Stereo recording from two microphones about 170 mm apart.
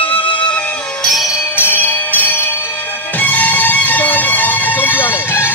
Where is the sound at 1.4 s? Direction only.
15° left (ahead or behind).